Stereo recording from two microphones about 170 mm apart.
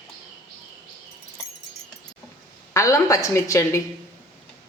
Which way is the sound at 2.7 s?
20° left (ahead or behind).